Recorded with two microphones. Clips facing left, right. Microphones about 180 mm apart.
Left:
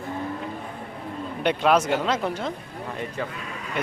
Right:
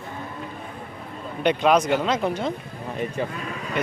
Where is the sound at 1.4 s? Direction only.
5° left (ahead or behind).